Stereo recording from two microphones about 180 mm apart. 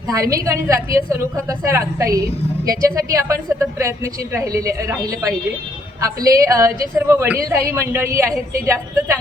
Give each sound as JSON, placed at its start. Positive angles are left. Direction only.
{"t": 0.1, "sound": "a woman's voice", "side_deg": -20}